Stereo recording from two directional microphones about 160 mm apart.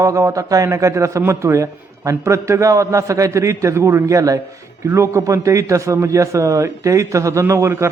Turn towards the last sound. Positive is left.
turn(degrees=-15)  # may be behind; listen again after turning